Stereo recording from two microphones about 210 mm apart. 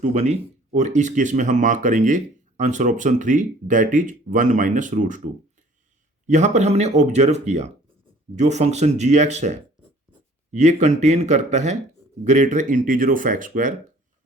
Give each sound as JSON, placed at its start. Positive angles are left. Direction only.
{"t": 0.0, "sound": "speech", "side_deg": -30}